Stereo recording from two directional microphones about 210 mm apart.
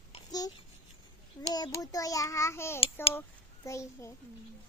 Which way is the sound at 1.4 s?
20° left (ahead or behind).